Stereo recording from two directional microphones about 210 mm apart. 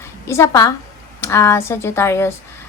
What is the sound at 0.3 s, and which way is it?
A woman's voice, 15° left (ahead or behind).